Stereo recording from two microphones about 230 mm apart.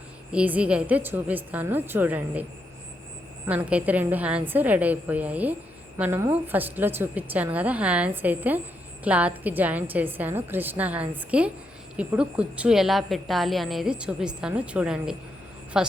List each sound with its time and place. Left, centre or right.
0.3 s a woman's voice: centre